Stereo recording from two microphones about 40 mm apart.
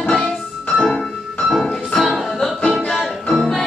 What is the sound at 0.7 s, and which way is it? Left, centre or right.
Music, centre.